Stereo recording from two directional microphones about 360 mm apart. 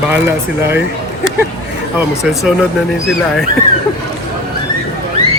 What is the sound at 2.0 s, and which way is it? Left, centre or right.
Speech, centre.